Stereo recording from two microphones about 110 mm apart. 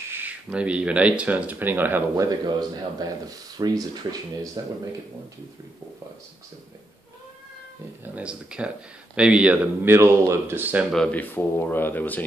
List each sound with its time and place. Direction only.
0.1 s speech: 15° right (ahead or behind)
2.1 s speech: 35° right (ahead or behind)
8.0 s speech: 10° right (ahead or behind)
9.8 s speech: 25° right (ahead or behind)
10.9 s speech: 5° left (ahead or behind)
11.1 s speech: 20° left (ahead or behind)